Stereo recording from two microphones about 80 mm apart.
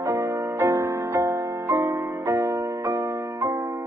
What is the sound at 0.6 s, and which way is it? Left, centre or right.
Music, right.